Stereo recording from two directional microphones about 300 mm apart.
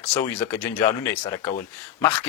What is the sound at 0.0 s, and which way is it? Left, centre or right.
Speech, centre.